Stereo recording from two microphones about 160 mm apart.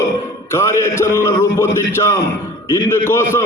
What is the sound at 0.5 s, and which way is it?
A man's voice, 15° left (ahead or behind).